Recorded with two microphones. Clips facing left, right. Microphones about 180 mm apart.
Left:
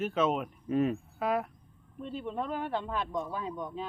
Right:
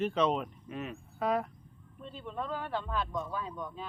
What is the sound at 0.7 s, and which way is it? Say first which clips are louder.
Speech: left 17 dB; 35° left (ahead or behind).